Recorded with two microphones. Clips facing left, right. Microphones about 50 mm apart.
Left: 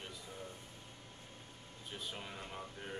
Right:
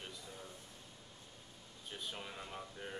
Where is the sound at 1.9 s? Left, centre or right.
Centre.